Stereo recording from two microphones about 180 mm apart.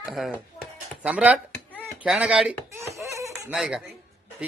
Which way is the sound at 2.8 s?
15° right (ahead or behind).